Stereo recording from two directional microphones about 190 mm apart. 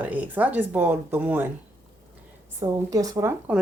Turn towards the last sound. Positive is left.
turn(degrees=-10)  # may be behind; listen again after turning